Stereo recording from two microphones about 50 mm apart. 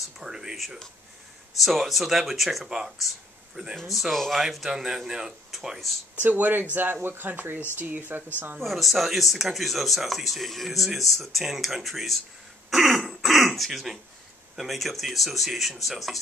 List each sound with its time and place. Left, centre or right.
0.2 s speech: centre
1.6 s speech: centre
6.1 s speech: right
8.5 s speech: centre
12.6 s throat clearing: centre
14.5 s speech: centre